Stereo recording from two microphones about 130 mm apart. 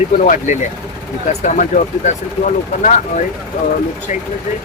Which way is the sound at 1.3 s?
75° left (ahead or behind).